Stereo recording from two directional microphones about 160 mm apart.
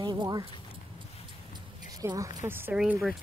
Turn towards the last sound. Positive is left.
turn(degrees=-5)  # may be behind; listen again after turning